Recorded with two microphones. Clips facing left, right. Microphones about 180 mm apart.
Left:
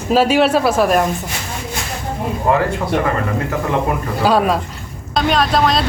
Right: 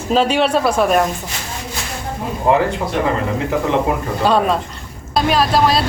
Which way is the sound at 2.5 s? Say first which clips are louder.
Right 2 dB; 20° right (ahead or behind).